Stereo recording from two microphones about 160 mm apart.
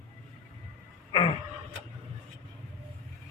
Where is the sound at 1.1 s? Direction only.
35° left (ahead or behind).